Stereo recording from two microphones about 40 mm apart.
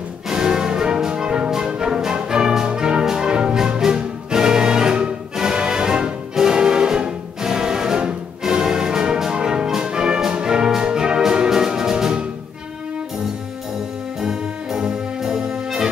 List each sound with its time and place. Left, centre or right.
0.3 s music: centre
14.2 s brass instrument: centre